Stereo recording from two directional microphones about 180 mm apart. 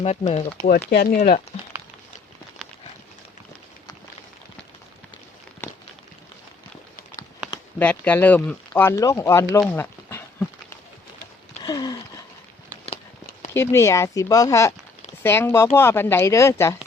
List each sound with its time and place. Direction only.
0.0 s speech: 35° left (ahead or behind)
0.9 s speech: 65° left (ahead or behind)
5.6 s a sound: 15° left (ahead or behind)
7.8 s speech: 10° left (ahead or behind)
11.6 s a sound: 20° left (ahead or behind)
13.5 s speech: 15° left (ahead or behind)